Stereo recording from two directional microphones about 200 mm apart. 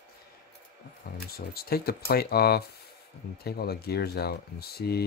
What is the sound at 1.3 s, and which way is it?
Speech, 50° left (ahead or behind).